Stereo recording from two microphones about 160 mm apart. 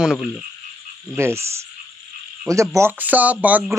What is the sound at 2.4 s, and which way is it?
Speech, 20° right (ahead or behind).